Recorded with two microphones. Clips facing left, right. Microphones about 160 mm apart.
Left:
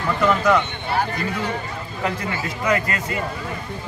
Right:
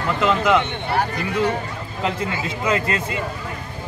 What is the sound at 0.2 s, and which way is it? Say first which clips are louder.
Speech: even; 20° right (ahead or behind).